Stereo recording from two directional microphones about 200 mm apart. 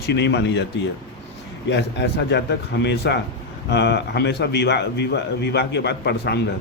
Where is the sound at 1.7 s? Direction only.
60° left (ahead or behind).